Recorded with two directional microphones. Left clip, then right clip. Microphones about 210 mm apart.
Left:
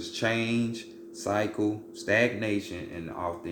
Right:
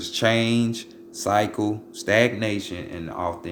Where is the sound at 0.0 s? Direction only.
45° right (ahead or behind).